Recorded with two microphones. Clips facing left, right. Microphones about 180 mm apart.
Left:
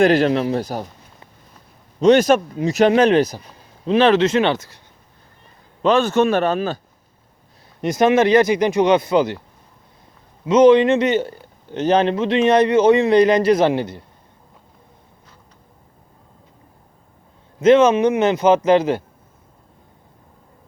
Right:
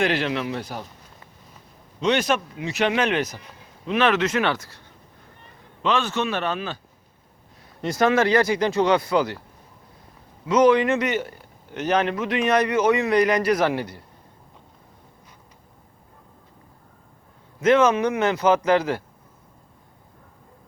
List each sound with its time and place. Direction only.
0.0 s speech: 40° left (ahead or behind)
2.0 s a man's voice: 45° left (ahead or behind); by 4.8 s 20° left (ahead or behind)
5.8 s speech: 40° left (ahead or behind)
7.8 s a man's voice: 20° left (ahead or behind)
10.4 s a man's voice: 25° left (ahead or behind)
17.6 s a man's voice: 20° left (ahead or behind)